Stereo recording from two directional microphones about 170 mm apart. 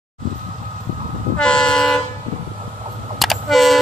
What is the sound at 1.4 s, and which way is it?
Train, 5° left (ahead or behind).